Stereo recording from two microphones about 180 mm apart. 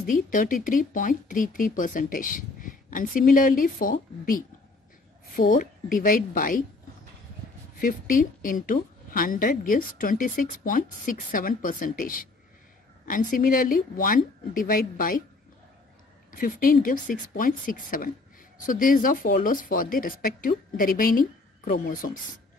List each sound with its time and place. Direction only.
0.1 s a woman's voice: 50° left (ahead or behind)
7.8 s a woman's voice: 50° left (ahead or behind)
16.3 s a woman's voice: 50° left (ahead or behind)